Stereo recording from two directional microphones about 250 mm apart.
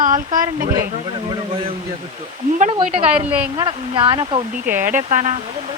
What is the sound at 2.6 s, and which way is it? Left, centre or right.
Speech, right.